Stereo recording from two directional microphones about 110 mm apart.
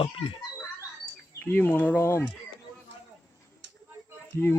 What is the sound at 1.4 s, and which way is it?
Speech, 20° left (ahead or behind).